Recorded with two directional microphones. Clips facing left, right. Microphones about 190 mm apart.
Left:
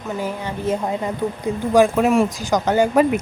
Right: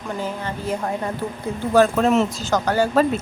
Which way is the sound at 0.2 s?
15° left (ahead or behind).